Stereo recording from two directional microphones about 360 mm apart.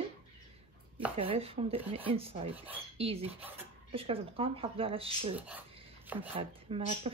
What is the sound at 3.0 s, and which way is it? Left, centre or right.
Speech, centre.